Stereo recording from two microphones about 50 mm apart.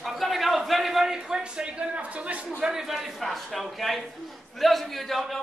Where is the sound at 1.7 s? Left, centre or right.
Right.